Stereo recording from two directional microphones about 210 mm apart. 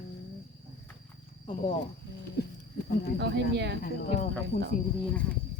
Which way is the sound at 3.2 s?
55° right (ahead or behind).